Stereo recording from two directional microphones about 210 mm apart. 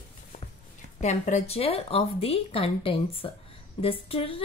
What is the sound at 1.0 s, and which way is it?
A woman's voice, 35° left (ahead or behind).